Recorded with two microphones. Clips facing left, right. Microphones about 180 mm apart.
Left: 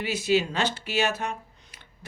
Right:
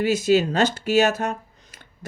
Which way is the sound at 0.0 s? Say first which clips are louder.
Right 6 dB; 45° right (ahead or behind).